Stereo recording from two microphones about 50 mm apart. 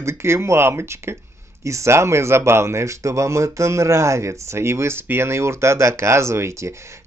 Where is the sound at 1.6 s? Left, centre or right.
Right.